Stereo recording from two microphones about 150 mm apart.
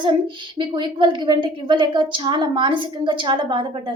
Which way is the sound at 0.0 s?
30° right (ahead or behind).